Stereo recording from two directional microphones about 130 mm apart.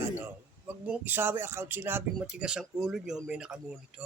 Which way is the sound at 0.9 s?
15° right (ahead or behind).